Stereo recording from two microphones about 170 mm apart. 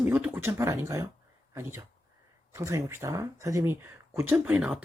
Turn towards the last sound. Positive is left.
turn(degrees=-10)  # may be behind; listen again after turning